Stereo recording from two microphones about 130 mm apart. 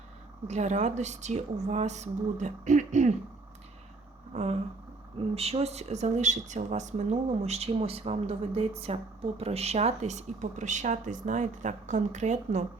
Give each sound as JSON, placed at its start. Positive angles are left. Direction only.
{"t": 0.4, "sound": "speech", "side_deg": -60}
{"t": 4.3, "sound": "speech", "side_deg": -55}